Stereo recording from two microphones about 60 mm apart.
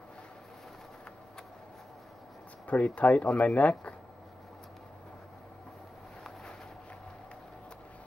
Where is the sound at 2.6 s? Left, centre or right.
Left.